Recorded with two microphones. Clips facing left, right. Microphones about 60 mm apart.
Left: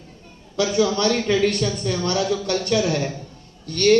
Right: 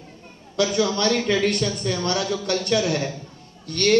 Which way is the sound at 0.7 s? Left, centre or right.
Left.